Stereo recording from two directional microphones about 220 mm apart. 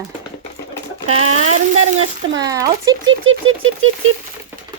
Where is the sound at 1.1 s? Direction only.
80° right.